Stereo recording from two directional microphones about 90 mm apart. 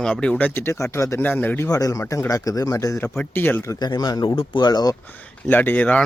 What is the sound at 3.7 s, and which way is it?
Speech, 45° left (ahead or behind).